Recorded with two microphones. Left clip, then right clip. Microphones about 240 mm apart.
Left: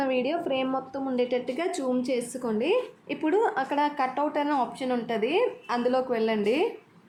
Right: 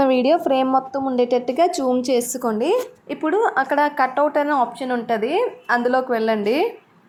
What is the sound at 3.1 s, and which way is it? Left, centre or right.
A woman's voice, centre.